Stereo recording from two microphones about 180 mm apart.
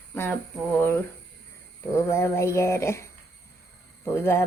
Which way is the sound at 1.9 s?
15° left (ahead or behind).